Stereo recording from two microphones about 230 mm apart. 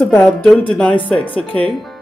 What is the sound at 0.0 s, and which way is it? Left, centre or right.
Speech, centre.